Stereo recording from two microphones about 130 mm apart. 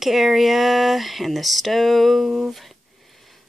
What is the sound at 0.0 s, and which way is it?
Speech, centre (ahead or behind).